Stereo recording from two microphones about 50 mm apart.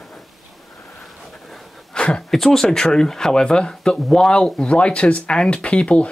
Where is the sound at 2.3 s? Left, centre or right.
Centre.